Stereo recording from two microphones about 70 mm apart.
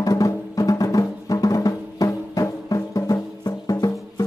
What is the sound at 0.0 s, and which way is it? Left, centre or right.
Music, left.